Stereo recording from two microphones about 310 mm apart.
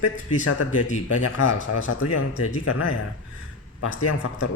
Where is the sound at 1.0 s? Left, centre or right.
Left.